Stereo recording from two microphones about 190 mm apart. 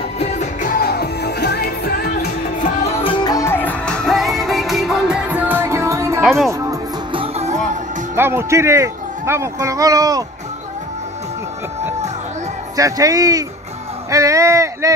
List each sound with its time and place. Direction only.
0.2 s music: 40° left (ahead or behind); by 2.0 s 60° left (ahead or behind)
2.9 s music: 25° left (ahead or behind); by 6.2 s 15° right (ahead or behind)
6.2 s speech: centre (ahead or behind)
6.7 s music: 25° right (ahead or behind)
8.2 s speech: 15° right (ahead or behind)
12.7 s speech: 15° right (ahead or behind)